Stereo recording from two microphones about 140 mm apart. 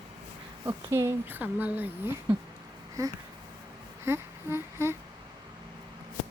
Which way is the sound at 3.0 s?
25° right (ahead or behind).